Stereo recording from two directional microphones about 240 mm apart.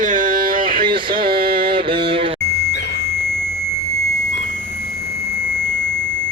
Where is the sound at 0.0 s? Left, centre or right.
Right.